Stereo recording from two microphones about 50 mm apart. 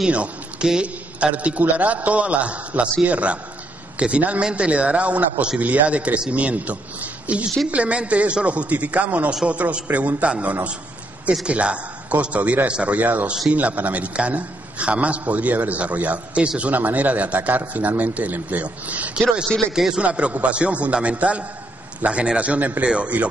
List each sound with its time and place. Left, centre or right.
0.1 s a man's voice: right
19.7 s a man's voice: centre
20.0 s a man's voice: right